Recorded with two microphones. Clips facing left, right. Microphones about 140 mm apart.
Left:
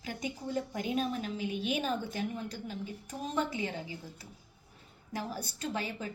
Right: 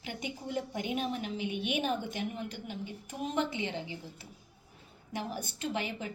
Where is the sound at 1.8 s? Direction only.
15° right (ahead or behind).